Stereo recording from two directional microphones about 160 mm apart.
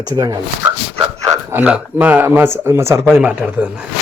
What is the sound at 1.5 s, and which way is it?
Speech, 10° right (ahead or behind).